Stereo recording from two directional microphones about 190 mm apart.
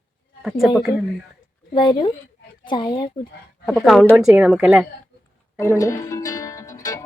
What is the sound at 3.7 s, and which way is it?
Speech, centre (ahead or behind).